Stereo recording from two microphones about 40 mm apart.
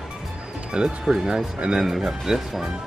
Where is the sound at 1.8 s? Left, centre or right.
Centre.